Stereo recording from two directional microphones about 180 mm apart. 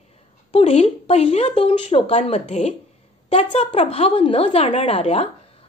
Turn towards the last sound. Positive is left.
turn(degrees=35)  # may be behind; listen again after turning